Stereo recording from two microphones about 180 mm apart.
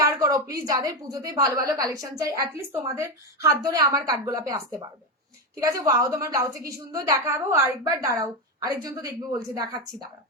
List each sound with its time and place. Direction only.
0.0 s a woman's voice: 20° right (ahead or behind)
5.6 s a woman's voice: 20° right (ahead or behind)